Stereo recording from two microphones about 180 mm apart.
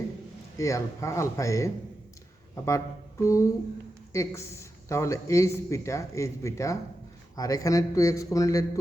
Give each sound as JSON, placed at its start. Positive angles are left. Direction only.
{"t": 0.5, "sound": "a man's voice", "side_deg": 15}